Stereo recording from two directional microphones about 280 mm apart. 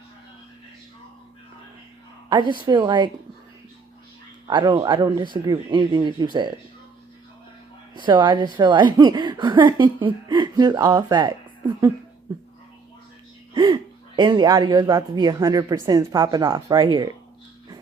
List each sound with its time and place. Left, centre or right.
2.3 s a woman's voice: centre
4.4 s a woman's voice: centre
7.9 s a woman's voice: centre
13.5 s a sound: centre
14.2 s a woman's voice: centre